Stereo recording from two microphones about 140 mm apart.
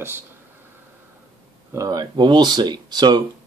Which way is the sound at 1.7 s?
25° right (ahead or behind).